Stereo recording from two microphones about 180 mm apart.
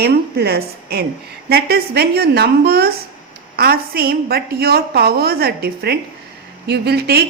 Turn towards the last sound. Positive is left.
turn(degrees=-65)  # may be behind; listen again after turning